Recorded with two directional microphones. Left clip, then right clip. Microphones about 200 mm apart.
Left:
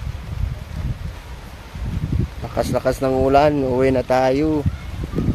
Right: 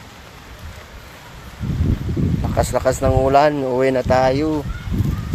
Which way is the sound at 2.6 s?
15° left (ahead or behind).